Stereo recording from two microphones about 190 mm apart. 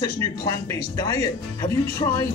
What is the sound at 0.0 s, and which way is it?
Speech, 20° left (ahead or behind).